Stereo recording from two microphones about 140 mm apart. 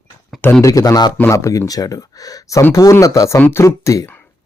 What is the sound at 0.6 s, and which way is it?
Speech, 25° left (ahead or behind).